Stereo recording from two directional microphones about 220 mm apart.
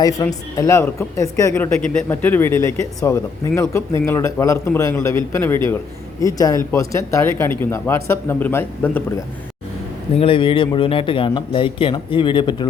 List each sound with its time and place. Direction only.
0.2 s speech: 15° left (ahead or behind)
10.2 s speech: 25° left (ahead or behind)